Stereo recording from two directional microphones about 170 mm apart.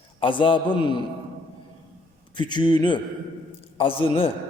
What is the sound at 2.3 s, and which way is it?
A man's voice, 25° left (ahead or behind).